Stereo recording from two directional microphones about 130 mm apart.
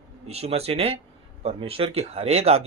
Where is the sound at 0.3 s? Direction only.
55° right (ahead or behind).